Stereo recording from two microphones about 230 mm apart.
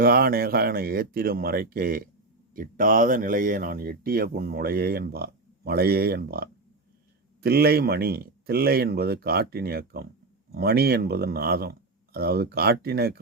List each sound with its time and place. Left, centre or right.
0.0 s speech: right